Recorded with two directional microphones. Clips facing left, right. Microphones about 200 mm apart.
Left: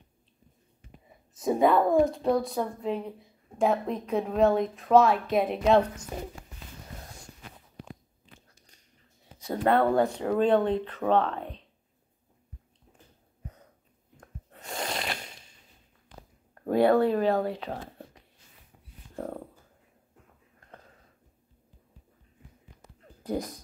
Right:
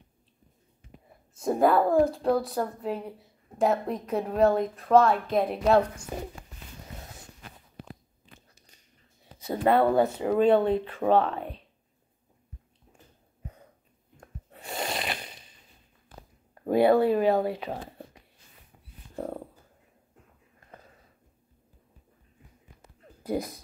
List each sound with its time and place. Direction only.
1.3 s a woman's voice: centre (ahead or behind)
9.4 s speech: 5° right (ahead or behind)
14.1 s a sound: 10° right (ahead or behind)
16.6 s speech: 5° right (ahead or behind)
19.1 s a sound: 5° right (ahead or behind)
23.2 s speech: 10° right (ahead or behind)